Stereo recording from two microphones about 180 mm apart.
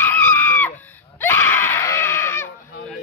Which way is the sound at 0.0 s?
10° left (ahead or behind).